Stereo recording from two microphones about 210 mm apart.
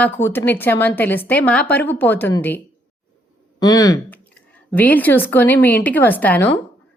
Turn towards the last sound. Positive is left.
turn(degrees=10)  # may be behind; listen again after turning